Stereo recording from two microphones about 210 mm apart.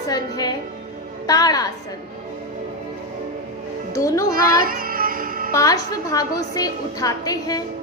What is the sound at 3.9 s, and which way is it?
Speech, 15° left (ahead or behind).